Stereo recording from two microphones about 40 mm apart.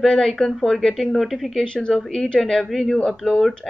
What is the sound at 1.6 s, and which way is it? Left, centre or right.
A woman's voice, left.